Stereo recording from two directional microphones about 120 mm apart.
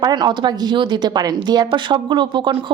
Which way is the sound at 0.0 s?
35° right (ahead or behind).